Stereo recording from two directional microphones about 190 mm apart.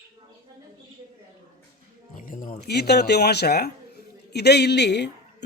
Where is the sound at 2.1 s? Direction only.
45° left (ahead or behind).